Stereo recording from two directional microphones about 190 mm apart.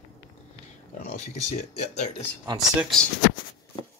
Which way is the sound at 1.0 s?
45° left (ahead or behind).